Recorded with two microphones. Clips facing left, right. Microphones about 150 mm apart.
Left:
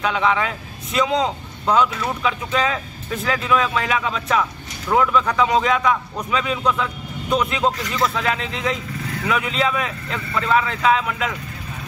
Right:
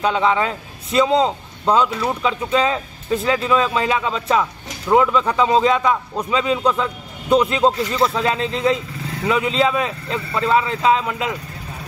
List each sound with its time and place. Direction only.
0.0 s speech: 30° right (ahead or behind)